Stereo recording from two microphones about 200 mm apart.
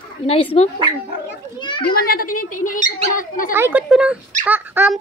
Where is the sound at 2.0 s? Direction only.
50° left (ahead or behind).